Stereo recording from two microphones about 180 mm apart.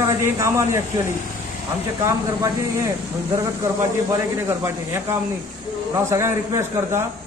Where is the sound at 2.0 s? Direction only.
15° right (ahead or behind).